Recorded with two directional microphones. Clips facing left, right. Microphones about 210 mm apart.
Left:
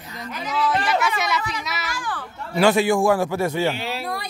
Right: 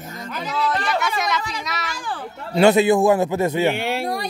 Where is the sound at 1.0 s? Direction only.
5° left (ahead or behind).